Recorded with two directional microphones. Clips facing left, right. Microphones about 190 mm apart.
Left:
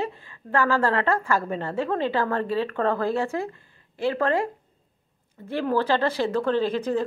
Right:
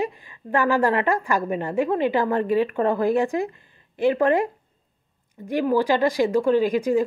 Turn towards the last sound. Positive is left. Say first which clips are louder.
# right 4 dB
turn(degrees=-10)  # may be behind; listen again after turning